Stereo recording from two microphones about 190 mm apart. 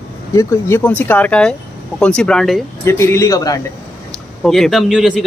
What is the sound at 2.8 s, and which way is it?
Speech, 15° left (ahead or behind).